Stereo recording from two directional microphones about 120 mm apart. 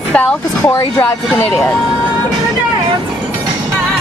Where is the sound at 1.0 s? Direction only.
5° left (ahead or behind).